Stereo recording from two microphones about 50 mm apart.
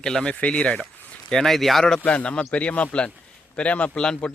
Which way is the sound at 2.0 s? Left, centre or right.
Left.